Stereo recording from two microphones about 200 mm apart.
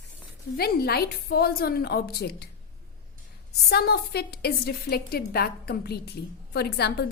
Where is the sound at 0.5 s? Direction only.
50° left (ahead or behind).